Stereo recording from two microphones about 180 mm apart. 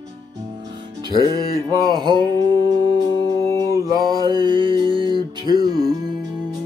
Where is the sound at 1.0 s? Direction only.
20° right (ahead or behind).